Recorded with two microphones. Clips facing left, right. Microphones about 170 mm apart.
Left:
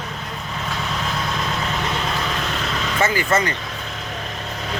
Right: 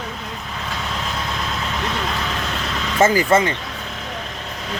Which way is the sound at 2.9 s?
40° right (ahead or behind).